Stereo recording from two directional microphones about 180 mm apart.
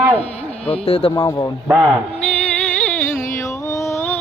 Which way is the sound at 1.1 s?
20° left (ahead or behind).